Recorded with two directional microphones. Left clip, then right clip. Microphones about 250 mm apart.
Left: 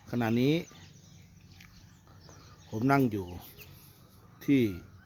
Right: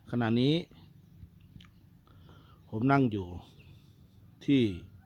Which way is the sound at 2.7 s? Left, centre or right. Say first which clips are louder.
Even; centre.